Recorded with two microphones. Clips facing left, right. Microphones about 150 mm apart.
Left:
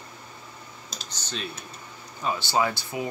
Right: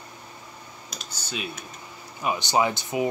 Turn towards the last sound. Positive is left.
turn(degrees=-20)  # may be behind; listen again after turning